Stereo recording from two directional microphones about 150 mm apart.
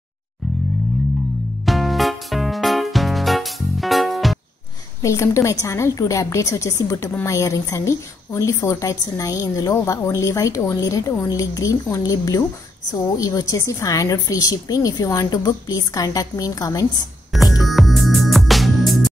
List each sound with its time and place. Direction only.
1.7 s music: centre (ahead or behind)
5.0 s a woman's voice: 20° left (ahead or behind)
17.3 s music: centre (ahead or behind)